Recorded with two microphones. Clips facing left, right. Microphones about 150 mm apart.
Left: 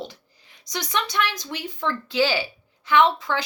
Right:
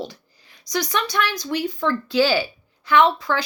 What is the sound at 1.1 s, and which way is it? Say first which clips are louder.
A woman's voice: right 3 dB; 25° left (ahead or behind).